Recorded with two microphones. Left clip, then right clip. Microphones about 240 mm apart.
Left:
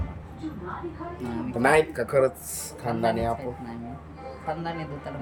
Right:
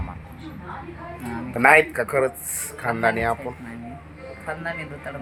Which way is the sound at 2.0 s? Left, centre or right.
Centre.